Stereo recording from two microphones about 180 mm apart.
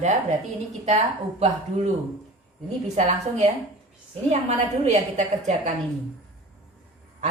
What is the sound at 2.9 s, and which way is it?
A woman's voice, 40° right (ahead or behind).